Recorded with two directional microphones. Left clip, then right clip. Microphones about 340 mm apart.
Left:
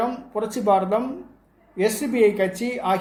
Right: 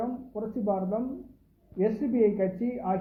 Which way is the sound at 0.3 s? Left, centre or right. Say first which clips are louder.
Left 11 dB; centre.